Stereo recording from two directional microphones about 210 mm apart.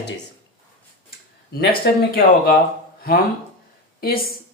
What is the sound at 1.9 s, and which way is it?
Speech, 50° left (ahead or behind).